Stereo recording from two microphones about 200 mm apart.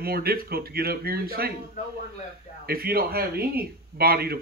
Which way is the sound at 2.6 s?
50° right (ahead or behind).